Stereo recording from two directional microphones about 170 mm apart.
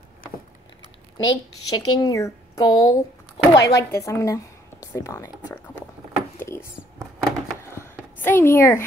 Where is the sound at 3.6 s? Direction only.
80° left.